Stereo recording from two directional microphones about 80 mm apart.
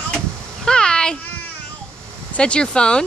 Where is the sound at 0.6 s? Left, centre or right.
Centre.